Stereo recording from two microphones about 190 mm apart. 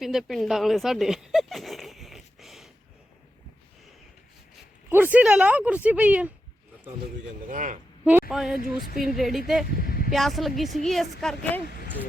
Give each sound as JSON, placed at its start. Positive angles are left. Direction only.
{"t": 0.0, "sound": "a sound", "side_deg": 0}
{"t": 4.9, "sound": "speech", "side_deg": -10}
{"t": 7.4, "sound": "a man's voice", "side_deg": -45}
{"t": 8.3, "sound": "a woman's voice", "side_deg": 0}
{"t": 8.5, "sound": "speech", "side_deg": 50}
{"t": 9.0, "sound": "a woman's voice", "side_deg": 0}
{"t": 9.6, "sound": "vehicle", "side_deg": 50}
{"t": 10.1, "sound": "a woman's voice", "side_deg": 0}